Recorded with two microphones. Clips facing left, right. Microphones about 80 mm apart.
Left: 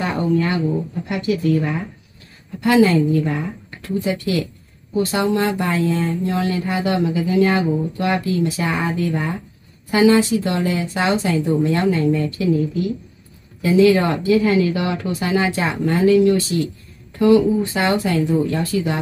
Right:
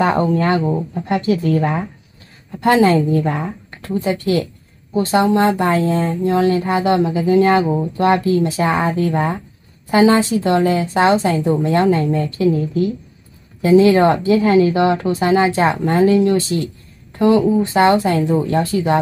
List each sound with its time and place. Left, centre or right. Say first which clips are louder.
0.0 s speech: right 4 dB; right